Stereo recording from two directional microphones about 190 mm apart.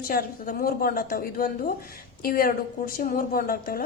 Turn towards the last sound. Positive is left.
turn(degrees=50)  # may be behind; listen again after turning